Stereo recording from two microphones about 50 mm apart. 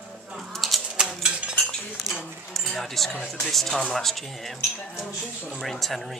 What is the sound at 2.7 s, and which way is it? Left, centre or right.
Speech, centre.